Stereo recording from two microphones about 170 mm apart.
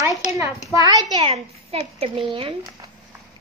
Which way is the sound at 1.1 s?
35° right (ahead or behind).